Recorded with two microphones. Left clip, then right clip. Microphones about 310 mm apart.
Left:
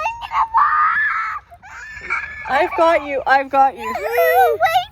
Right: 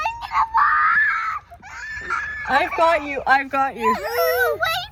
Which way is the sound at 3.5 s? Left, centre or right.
Centre.